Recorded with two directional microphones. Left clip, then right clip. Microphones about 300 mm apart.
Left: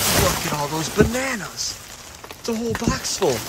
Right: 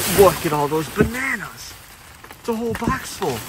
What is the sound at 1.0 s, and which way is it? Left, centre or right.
Speech, centre.